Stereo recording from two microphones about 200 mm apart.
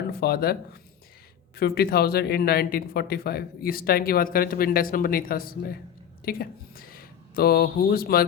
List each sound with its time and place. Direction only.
0.1 s speech: 50° left (ahead or behind)